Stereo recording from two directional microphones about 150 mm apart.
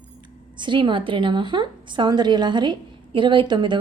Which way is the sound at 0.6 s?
30° right (ahead or behind).